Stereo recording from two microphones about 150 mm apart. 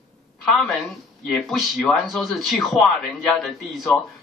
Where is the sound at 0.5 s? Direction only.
Centre (ahead or behind).